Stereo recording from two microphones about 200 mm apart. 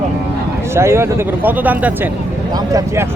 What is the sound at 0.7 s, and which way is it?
Speech, 15° right (ahead or behind).